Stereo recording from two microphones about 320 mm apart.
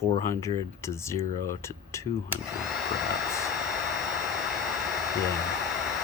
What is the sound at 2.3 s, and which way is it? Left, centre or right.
Hair dryer, centre.